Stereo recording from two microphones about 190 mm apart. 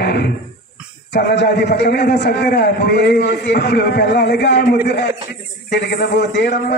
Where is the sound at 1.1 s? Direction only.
60° left (ahead or behind).